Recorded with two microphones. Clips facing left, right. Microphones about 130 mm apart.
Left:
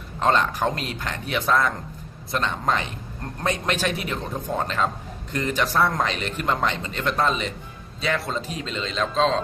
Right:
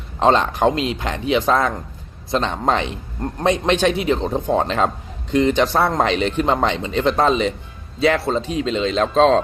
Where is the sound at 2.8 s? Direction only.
25° right (ahead or behind).